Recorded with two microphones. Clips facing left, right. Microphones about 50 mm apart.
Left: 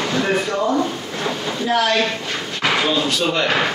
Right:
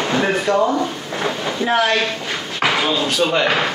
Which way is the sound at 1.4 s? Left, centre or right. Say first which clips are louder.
Right 1 dB; right.